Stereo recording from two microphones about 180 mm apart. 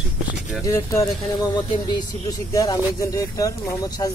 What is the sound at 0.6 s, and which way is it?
Speech, 15° left (ahead or behind).